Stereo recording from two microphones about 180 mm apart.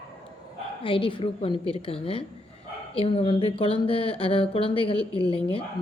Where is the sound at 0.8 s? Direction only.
30° left (ahead or behind).